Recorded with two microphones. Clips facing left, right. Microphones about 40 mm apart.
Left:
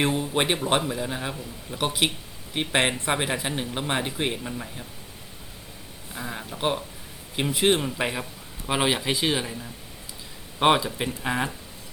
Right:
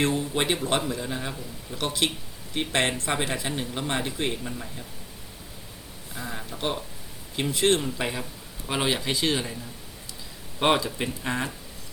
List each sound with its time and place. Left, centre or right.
0.0 s speech: left
6.1 s speech: centre
10.6 s speech: centre